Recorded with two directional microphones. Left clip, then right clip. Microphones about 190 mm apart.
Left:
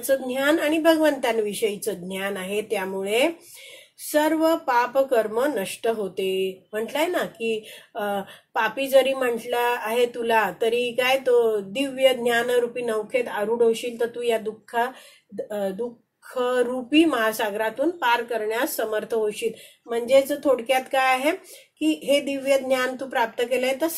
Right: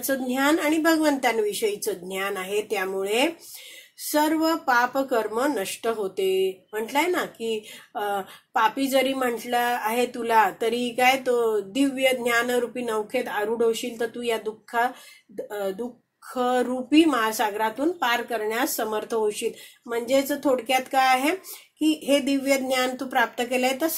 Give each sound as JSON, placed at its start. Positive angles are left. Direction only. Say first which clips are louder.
{"t": 0.0, "sound": "speech", "louder": "left 2 dB", "side_deg": -35}
{"t": 16.3, "sound": "speech", "louder": "left 1 dB", "side_deg": -30}